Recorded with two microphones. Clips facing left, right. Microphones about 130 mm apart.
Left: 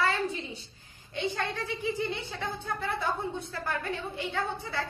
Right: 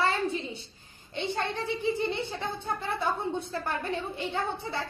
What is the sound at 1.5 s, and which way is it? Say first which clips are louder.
Speech: right 3 dB; 25° right (ahead or behind).